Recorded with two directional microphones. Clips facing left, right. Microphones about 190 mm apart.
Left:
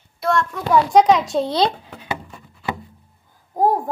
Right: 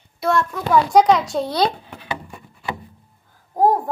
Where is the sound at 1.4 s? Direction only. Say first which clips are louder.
Left 1 dB; 25° left (ahead or behind).